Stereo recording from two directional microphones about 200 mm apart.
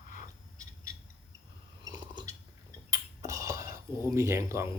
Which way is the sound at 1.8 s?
20° right (ahead or behind).